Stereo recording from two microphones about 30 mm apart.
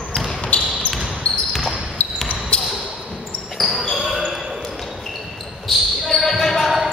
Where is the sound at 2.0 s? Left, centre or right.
Left.